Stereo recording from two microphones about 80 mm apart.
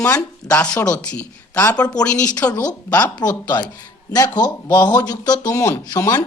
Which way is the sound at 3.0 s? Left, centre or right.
Left.